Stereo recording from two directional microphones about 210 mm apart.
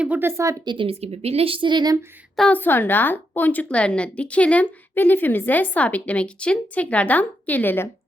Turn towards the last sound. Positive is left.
turn(degrees=10)  # may be behind; listen again after turning